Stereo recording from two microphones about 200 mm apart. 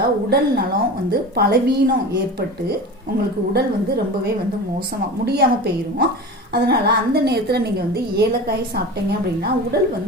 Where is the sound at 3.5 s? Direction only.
55° right (ahead or behind).